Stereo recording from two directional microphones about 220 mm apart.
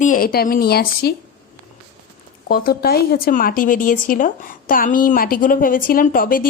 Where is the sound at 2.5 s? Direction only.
45° left (ahead or behind).